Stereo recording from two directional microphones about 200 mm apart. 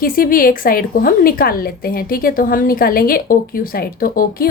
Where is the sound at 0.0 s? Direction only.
45° left (ahead or behind).